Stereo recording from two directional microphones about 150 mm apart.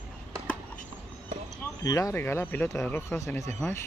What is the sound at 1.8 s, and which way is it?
Speech, 25° left (ahead or behind).